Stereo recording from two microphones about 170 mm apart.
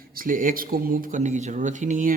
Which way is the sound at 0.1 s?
55° right (ahead or behind).